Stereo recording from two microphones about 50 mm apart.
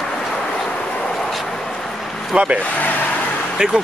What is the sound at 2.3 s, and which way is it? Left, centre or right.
Speech, right.